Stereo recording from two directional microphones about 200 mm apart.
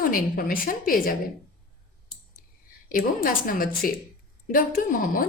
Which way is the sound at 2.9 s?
45° left (ahead or behind).